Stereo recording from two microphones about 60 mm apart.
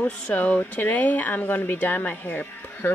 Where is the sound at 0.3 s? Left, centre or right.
Left.